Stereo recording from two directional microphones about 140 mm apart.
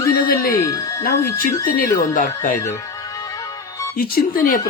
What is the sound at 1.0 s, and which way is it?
Speech, 75° left (ahead or behind).